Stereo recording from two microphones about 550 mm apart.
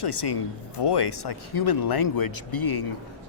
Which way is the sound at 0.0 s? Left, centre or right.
Left.